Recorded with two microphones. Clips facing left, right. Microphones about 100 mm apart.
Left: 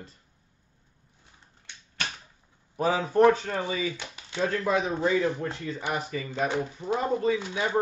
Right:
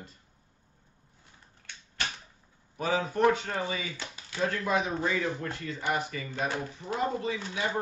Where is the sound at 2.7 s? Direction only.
35° left (ahead or behind).